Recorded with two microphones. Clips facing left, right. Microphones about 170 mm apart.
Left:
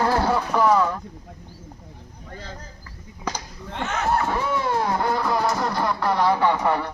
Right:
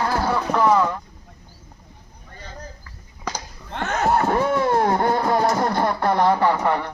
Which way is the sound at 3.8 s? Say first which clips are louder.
Right 3 dB; 40° right (ahead or behind).